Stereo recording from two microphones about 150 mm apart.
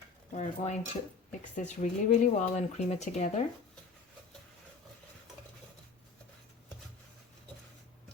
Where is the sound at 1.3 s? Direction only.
55° left (ahead or behind).